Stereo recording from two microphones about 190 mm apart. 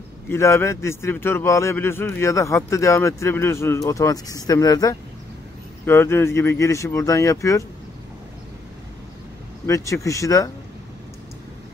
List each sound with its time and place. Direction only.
0.3 s a man's voice: 15° left (ahead or behind)
9.7 s a man's voice: 15° left (ahead or behind)